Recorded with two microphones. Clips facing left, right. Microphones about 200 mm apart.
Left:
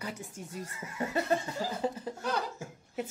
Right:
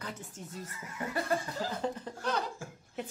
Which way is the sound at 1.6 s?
5° left (ahead or behind).